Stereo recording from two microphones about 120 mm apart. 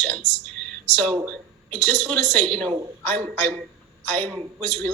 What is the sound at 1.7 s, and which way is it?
A woman's voice, 15° left (ahead or behind).